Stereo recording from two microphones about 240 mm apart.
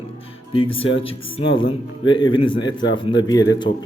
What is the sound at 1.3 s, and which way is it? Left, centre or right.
Speech, left.